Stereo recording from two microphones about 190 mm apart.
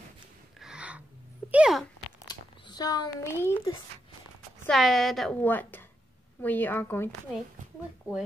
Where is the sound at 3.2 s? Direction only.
15° left (ahead or behind).